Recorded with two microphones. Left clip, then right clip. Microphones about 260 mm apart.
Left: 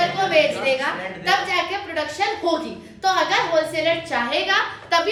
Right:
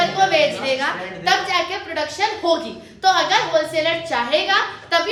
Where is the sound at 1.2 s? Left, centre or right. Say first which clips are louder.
Right 2 dB; centre.